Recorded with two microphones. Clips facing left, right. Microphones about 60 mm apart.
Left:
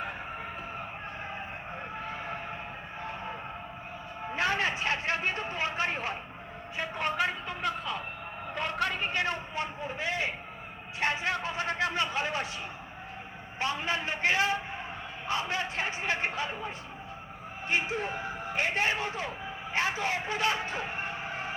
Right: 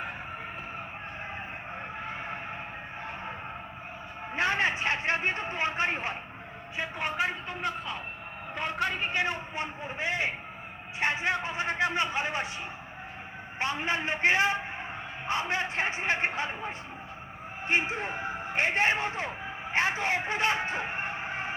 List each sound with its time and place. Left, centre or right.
4.4 s a man's voice: right
6.7 s a man's voice: centre
7.6 s a man's voice: right
8.5 s a man's voice: centre
13.6 s a man's voice: right